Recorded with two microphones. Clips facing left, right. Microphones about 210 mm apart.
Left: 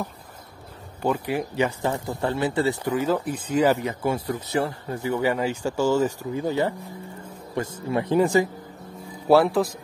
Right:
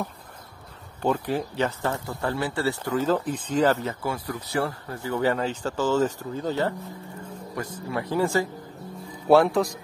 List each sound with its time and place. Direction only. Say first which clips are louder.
1.0 s speech: even; 10° left (ahead or behind)
7.5 s speech: left 5 dB; 25° left (ahead or behind)
9.3 s speech: even; centre (ahead or behind)